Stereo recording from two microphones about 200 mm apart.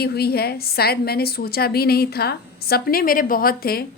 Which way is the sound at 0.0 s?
50° left (ahead or behind).